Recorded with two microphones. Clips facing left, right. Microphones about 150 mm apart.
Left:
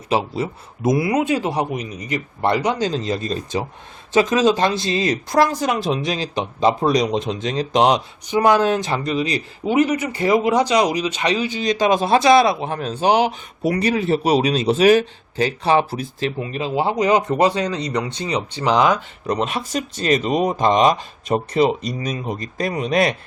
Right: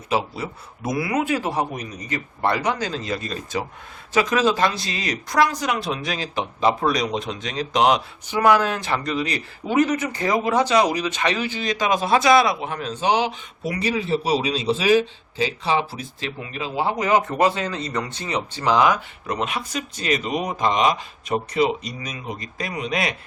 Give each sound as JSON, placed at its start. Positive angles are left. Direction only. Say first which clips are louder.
{"t": 0.1, "sound": "a man's voice", "louder": "left 3 dB", "side_deg": 25}
{"t": 2.6, "sound": "a man's voice", "louder": "left 4 dB", "side_deg": 30}
{"t": 16.4, "sound": "speech", "louder": "left 2 dB", "side_deg": 30}